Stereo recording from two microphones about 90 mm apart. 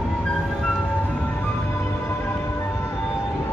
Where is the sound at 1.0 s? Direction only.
25° left (ahead or behind).